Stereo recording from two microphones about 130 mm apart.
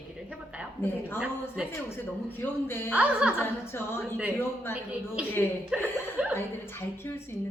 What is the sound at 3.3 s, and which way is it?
Speech, 15° left (ahead or behind).